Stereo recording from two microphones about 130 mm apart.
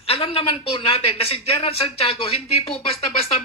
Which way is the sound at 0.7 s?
45° left (ahead or behind).